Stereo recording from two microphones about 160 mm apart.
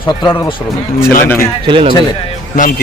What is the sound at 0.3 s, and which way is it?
Speech, 25° left (ahead or behind).